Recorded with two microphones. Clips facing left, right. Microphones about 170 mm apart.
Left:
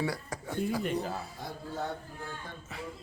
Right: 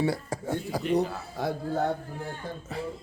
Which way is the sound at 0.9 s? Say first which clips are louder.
Right 7 dB; 70° right (ahead or behind).